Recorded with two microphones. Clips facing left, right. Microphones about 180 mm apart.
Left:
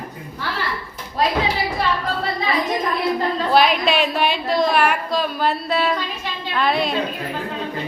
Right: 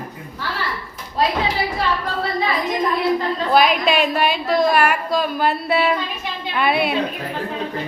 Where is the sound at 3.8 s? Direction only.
45° right (ahead or behind).